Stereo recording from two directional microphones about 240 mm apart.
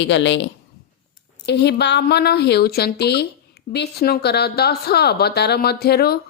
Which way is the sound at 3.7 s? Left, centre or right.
Left.